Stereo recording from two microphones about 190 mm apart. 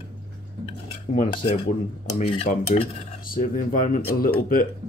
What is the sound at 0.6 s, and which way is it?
Dishes, 35° left (ahead or behind).